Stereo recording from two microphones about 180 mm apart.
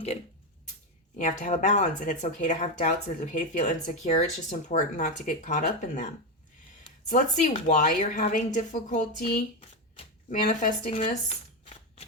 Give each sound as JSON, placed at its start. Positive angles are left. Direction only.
{"t": 1.2, "sound": "speech", "side_deg": 45}
{"t": 7.1, "sound": "speech", "side_deg": 45}
{"t": 10.2, "sound": "speech", "side_deg": 45}